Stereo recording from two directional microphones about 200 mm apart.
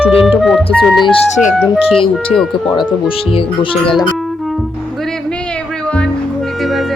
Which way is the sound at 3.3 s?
25° left (ahead or behind).